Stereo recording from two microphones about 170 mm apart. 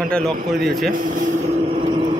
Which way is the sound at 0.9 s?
50° right (ahead or behind).